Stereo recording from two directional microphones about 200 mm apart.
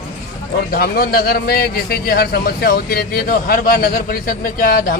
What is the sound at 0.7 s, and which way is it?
A man's voice, 50° left (ahead or behind).